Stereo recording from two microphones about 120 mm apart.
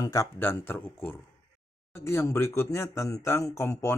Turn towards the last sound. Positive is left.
turn(degrees=25)  # may be behind; listen again after turning